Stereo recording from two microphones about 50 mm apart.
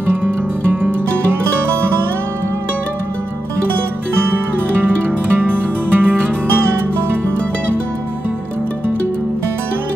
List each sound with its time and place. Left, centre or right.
4.8 s music: right